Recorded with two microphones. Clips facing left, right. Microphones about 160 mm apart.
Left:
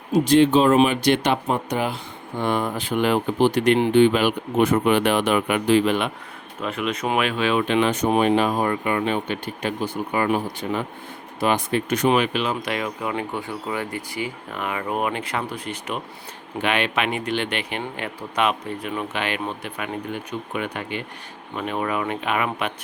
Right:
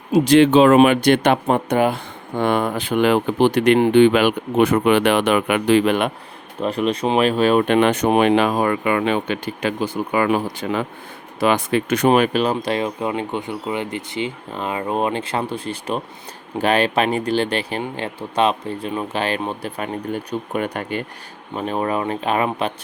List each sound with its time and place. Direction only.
0.1 s speech: 90° right; by 2.0 s 55° right (ahead or behind)
2.4 s speech: 65° right (ahead or behind)
6.6 s speech: 35° right (ahead or behind); by 12.0 s 90° right
12.0 s speech: 45° right (ahead or behind)
21.5 s speech: 35° right (ahead or behind)